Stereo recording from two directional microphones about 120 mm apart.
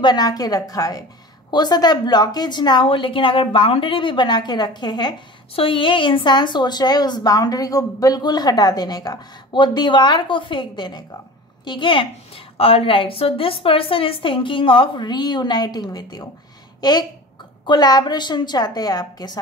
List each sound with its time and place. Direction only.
0.0 s a woman's voice: 35° left (ahead or behind)